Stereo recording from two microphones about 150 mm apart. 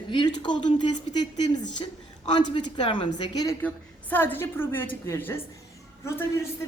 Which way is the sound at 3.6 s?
10° left (ahead or behind).